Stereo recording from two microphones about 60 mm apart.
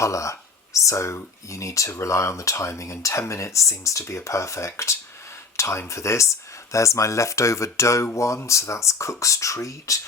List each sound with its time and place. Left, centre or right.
0.0 s speech: left